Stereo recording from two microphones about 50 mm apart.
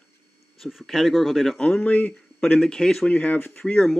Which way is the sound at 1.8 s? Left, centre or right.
Left.